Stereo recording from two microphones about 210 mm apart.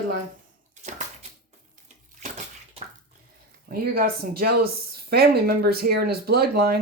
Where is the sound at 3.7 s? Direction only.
45° right (ahead or behind).